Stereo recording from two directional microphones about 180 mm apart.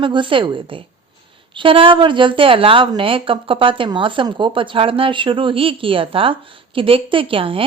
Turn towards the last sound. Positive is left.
turn(degrees=-30)  # may be behind; listen again after turning